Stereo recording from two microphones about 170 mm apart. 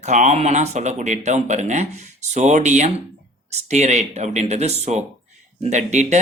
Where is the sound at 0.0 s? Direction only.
45° right (ahead or behind).